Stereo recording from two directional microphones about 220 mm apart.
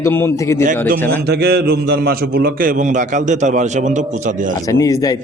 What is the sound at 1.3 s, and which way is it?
A man's voice, 45° right (ahead or behind).